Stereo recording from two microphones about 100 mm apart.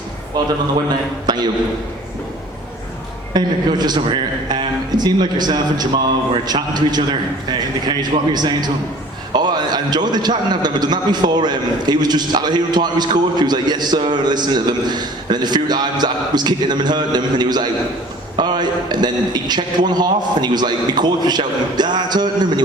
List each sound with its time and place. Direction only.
0.4 s a man's voice: 45° right (ahead or behind)
3.3 s a man's voice: 45° right (ahead or behind)